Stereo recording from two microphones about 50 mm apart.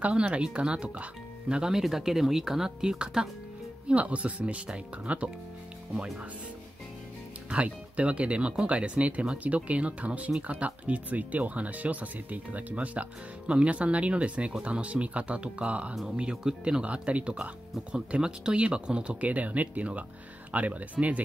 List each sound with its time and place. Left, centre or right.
0.0 s speech: right
3.9 s speech: right
7.4 s speech: right